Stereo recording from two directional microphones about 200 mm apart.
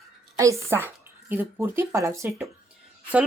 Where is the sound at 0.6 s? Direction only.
10° right (ahead or behind).